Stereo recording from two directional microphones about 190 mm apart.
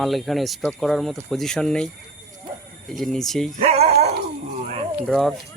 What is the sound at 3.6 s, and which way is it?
Speech, 30° right (ahead or behind).